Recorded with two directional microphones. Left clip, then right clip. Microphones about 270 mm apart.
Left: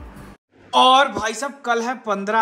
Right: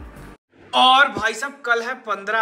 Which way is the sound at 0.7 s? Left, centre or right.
Left.